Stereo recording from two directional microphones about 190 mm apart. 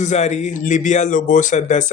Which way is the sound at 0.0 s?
35° left (ahead or behind).